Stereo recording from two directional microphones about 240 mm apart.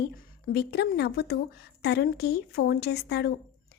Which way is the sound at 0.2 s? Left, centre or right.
Left.